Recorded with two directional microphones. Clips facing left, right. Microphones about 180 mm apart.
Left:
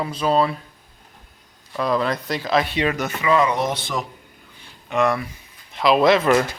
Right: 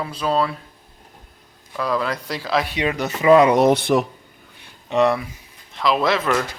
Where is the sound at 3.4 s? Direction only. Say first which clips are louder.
Right 6 dB; 65° right (ahead or behind).